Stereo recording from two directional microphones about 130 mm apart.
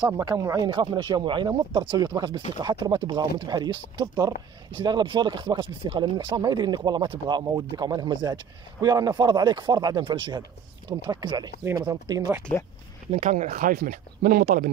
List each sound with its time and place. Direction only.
0.0 s speech: 30° right (ahead or behind)
13.2 s speech: 75° right (ahead or behind); by 14.6 s 90° right